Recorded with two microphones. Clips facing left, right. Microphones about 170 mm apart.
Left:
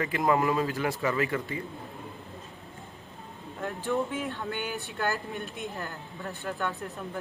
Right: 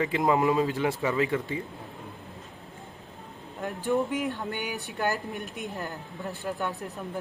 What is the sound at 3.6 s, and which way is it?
Speech, 15° right (ahead or behind).